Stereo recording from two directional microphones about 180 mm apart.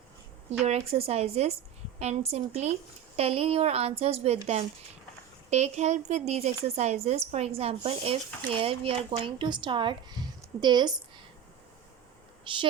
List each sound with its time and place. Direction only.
0.6 s a woman's voice: 35° right (ahead or behind)
12.5 s a woman's voice: 25° right (ahead or behind)